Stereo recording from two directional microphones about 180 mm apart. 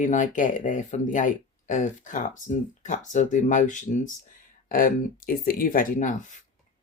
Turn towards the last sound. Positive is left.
turn(degrees=45)  # may be behind; listen again after turning